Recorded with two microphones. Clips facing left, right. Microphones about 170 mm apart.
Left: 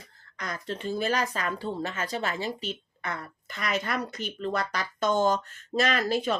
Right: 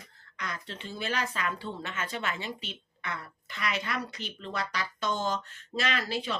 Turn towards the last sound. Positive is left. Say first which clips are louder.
# left 6 dB
turn(degrees=50)  # may be behind; listen again after turning